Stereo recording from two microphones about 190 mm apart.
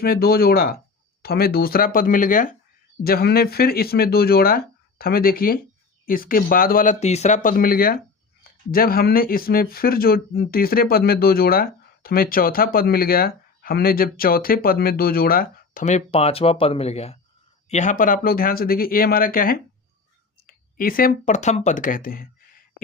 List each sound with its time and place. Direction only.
0.0 s speech: 50° left (ahead or behind)